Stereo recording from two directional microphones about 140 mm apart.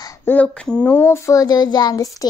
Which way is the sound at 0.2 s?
10° left (ahead or behind).